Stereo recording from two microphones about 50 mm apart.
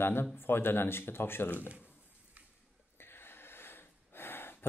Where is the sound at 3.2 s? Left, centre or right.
Left.